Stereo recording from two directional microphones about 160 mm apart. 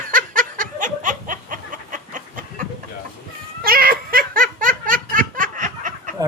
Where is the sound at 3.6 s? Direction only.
65° right (ahead or behind).